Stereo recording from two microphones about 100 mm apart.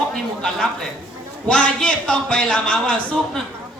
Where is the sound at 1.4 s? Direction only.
10° left (ahead or behind).